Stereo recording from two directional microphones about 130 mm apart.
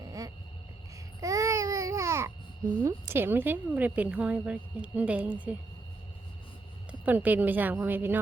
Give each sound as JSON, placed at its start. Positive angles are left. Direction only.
{"t": 0.0, "sound": "a sound", "side_deg": -25}
{"t": 1.2, "sound": "babbling", "side_deg": -25}
{"t": 2.8, "sound": "speech", "side_deg": -15}
{"t": 7.0, "sound": "speech", "side_deg": -10}